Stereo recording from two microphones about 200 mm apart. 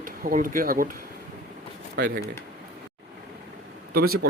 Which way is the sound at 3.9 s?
50° right (ahead or behind).